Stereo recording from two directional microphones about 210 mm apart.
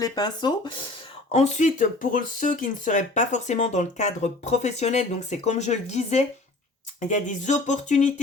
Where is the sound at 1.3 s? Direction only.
35° left (ahead or behind).